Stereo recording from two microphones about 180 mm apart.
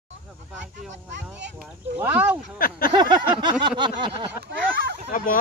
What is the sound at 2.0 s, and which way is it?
Speech, 10° right (ahead or behind).